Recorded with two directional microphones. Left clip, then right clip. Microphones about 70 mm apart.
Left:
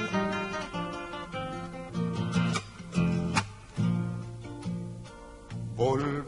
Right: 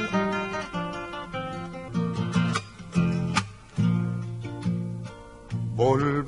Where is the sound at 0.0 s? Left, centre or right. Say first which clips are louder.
Right 4 dB; left.